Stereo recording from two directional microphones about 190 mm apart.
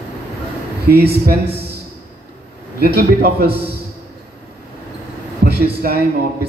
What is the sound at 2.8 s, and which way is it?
Speech, 55° right (ahead or behind).